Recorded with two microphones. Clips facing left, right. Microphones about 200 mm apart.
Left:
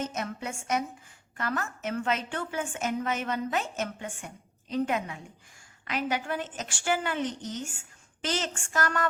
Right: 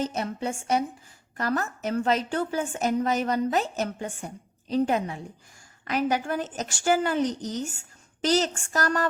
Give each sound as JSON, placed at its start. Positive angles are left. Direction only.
{"t": 0.0, "sound": "a woman's voice", "side_deg": -35}